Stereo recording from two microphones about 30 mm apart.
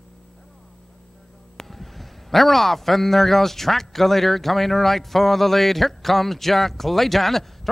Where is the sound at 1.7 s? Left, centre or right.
Centre.